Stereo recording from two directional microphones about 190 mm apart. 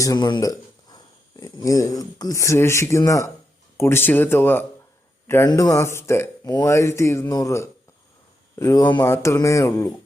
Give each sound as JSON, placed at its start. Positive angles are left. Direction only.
{"t": 0.0, "sound": "a man's voice", "side_deg": 20}